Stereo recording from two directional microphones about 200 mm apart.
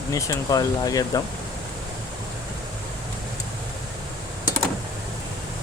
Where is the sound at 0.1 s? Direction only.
15° left (ahead or behind).